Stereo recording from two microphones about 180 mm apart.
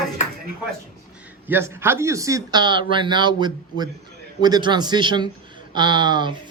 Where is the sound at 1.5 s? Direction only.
15° right (ahead or behind).